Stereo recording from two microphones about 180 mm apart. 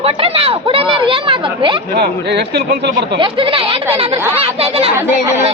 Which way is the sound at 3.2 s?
30° right (ahead or behind).